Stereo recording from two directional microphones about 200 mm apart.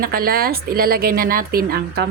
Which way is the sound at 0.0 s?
50° right (ahead or behind).